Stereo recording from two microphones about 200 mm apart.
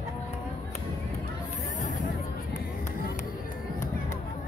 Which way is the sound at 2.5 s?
50° left (ahead or behind).